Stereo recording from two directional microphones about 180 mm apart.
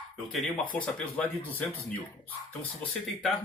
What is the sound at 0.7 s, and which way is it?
Speech, 5° left (ahead or behind).